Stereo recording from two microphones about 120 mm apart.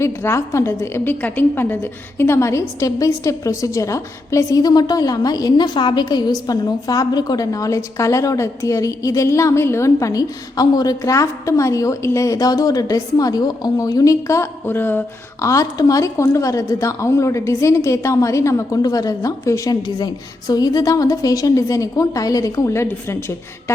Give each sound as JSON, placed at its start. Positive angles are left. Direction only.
{"t": 0.0, "sound": "a woman's voice", "side_deg": 25}